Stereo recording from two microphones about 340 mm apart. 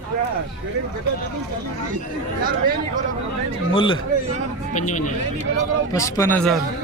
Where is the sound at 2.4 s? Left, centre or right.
Right.